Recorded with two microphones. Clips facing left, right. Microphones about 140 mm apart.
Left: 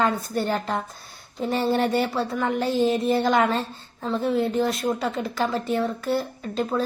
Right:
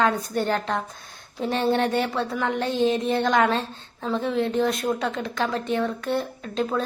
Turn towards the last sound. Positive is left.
turn(degrees=0)  # may be behind; listen again after turning